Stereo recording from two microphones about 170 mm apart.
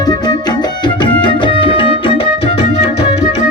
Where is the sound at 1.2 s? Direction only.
30° left (ahead or behind).